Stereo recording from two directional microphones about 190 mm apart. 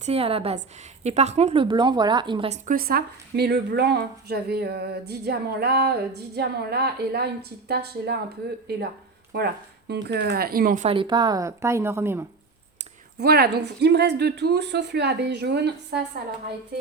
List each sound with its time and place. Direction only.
0.0 s a woman's voice: 30° right (ahead or behind)
2.6 s a woman's voice: 50° right (ahead or behind)
10.8 s a woman's voice: 25° right (ahead or behind)
13.1 s a woman's voice: 55° right (ahead or behind)